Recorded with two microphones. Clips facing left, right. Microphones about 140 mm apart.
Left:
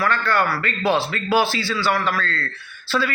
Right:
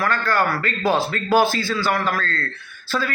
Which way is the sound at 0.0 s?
45° right (ahead or behind).